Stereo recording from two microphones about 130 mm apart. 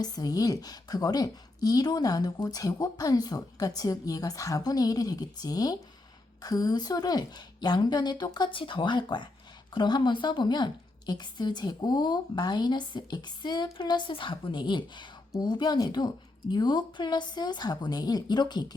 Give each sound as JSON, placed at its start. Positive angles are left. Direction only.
{"t": 0.0, "sound": "a woman's voice", "side_deg": 30}